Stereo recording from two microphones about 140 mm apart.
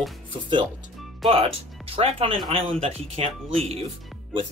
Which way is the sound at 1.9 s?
45° right (ahead or behind).